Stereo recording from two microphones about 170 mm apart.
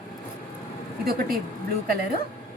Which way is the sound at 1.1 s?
60° right (ahead or behind).